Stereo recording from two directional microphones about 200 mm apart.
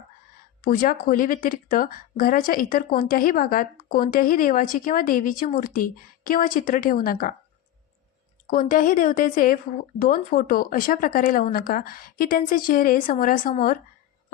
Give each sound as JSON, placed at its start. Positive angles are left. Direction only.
{"t": 0.6, "sound": "speech", "side_deg": 45}
{"t": 8.4, "sound": "a woman's voice", "side_deg": 40}